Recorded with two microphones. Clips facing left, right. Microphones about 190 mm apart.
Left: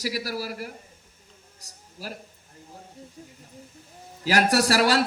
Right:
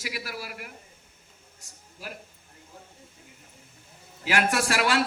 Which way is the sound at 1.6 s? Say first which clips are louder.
Left 3 dB; 35° left (ahead or behind).